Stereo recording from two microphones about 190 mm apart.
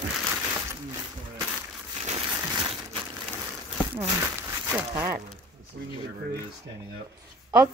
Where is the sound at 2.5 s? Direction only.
25° right (ahead or behind).